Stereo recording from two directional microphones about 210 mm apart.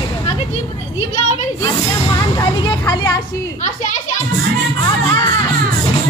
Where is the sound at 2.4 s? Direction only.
15° left (ahead or behind).